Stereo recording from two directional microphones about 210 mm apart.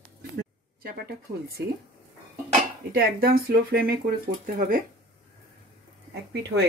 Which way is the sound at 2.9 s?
45° right (ahead or behind).